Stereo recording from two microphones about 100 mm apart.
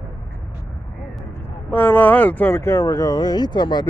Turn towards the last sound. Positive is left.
turn(degrees=50)  # may be behind; listen again after turning